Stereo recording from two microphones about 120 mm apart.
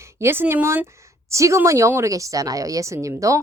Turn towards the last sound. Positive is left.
turn(degrees=-25)  # may be behind; listen again after turning